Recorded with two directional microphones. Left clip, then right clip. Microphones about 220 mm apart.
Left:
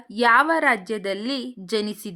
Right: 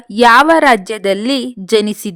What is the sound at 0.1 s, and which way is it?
A woman's voice, 45° right (ahead or behind).